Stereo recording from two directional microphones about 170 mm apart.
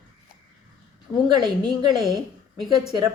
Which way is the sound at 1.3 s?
25° right (ahead or behind).